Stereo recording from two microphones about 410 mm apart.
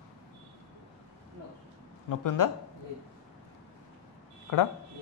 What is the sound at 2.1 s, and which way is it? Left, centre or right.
Speech, left.